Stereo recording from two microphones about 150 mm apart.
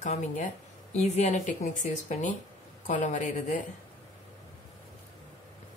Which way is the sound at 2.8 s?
55° left (ahead or behind).